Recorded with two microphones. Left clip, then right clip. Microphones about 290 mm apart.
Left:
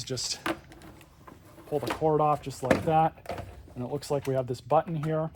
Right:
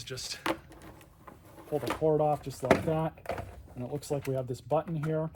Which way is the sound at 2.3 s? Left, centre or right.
Centre.